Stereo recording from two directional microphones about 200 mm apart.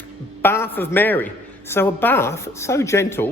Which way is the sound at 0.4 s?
10° left (ahead or behind).